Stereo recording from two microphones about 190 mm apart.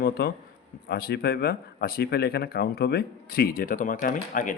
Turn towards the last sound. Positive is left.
turn(degrees=45)  # may be behind; listen again after turning